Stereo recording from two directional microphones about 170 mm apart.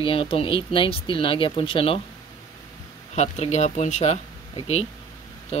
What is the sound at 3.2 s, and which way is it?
Speech, 40° left (ahead or behind).